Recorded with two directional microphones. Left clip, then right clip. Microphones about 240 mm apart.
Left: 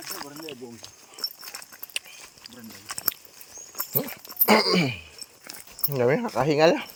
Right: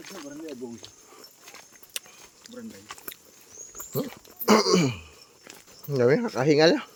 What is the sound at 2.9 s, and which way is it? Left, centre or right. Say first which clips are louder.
Speech: left 8 dB; left.